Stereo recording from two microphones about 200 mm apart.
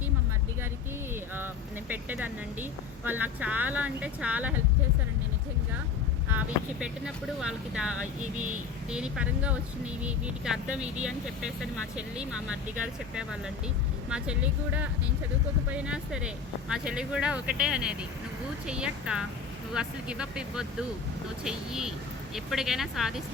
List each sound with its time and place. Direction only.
1.9 s a woman's voice: 10° right (ahead or behind)
6.2 s speech: 5° right (ahead or behind)
8.2 s speech: 40° right (ahead or behind)
8.9 s speech: 5° right (ahead or behind)
14.1 s a woman's voice: 5° right (ahead or behind)